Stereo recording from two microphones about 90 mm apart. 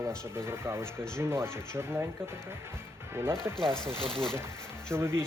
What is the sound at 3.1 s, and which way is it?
Speech, 25° right (ahead or behind).